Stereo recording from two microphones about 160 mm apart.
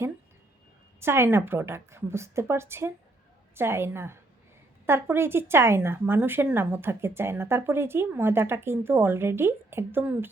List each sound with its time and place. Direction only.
0.9 s speech: 15° right (ahead or behind)